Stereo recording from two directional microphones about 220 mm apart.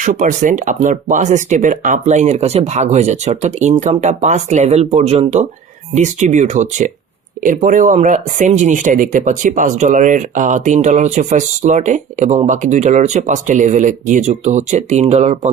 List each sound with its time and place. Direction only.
0.0 s speech: 35° right (ahead or behind)